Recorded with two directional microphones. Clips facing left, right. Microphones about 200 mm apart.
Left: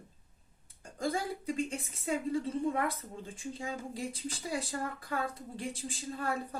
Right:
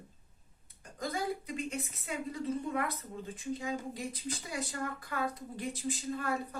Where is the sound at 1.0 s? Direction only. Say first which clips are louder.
Left 2 dB; 30° left (ahead or behind).